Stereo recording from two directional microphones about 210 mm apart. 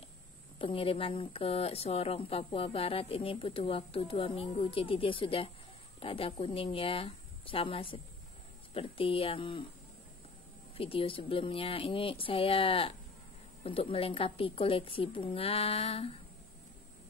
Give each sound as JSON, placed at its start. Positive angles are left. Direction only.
{"t": 0.6, "sound": "a woman's voice", "side_deg": 25}
{"t": 10.8, "sound": "a woman's voice", "side_deg": 25}